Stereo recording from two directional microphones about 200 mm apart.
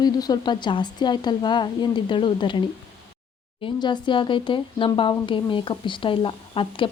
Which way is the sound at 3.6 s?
25° left (ahead or behind).